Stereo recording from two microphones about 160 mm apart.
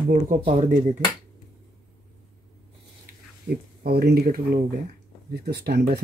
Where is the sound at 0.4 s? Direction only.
35° right (ahead or behind).